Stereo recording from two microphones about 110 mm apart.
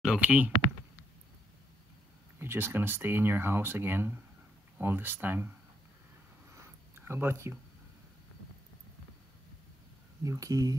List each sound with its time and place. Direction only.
0.0 s speech: 10° right (ahead or behind)
2.3 s speech: 20° right (ahead or behind)
6.5 s a sound: 25° right (ahead or behind)
10.2 s speech: 30° right (ahead or behind)